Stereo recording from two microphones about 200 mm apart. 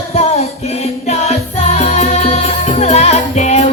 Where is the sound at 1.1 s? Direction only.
30° left (ahead or behind).